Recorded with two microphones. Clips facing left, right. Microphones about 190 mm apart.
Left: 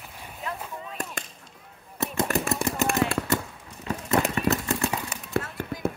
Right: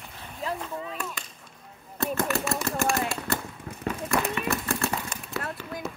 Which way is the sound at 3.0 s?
70° left (ahead or behind).